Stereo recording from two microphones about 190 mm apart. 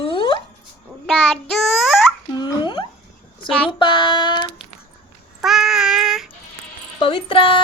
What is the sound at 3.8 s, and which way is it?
Speech, 25° left (ahead or behind).